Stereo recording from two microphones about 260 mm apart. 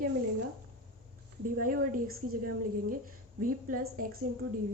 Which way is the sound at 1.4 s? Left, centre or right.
Right.